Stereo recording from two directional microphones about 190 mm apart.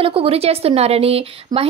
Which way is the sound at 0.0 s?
30° right (ahead or behind).